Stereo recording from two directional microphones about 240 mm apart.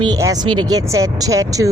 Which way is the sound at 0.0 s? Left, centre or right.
Centre.